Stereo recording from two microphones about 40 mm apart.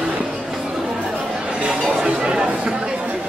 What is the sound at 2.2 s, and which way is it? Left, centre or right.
Chatter, right.